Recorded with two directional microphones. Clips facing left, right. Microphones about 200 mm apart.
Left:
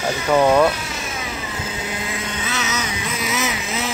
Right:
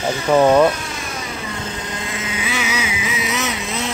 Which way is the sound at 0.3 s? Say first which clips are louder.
Right 2 dB; 10° right (ahead or behind).